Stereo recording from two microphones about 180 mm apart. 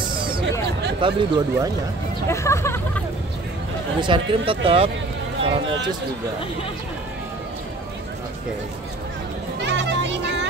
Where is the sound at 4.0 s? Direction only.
30° right (ahead or behind).